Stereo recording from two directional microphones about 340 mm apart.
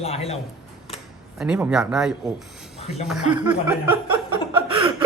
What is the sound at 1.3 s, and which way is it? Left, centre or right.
Speech, centre.